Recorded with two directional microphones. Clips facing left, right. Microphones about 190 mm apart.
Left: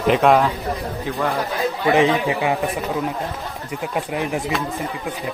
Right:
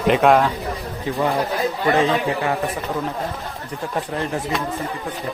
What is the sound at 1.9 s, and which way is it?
Speech, 15° left (ahead or behind).